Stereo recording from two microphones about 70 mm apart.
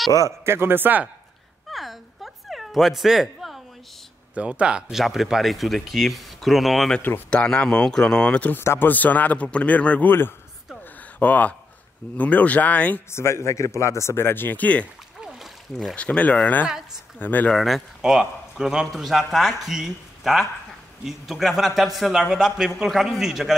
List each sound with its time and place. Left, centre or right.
0.5 s speech: right
1.7 s cat: centre
4.4 s speech: centre
4.9 s speech: centre
7.2 s speech: centre
8.5 s speech: left
11.1 s speech: left
13.1 s a man's voice: left
15.1 s a sound: centre
15.9 s speech: centre
16.6 s speech: centre
17.2 s speech: left
17.5 s speech: centre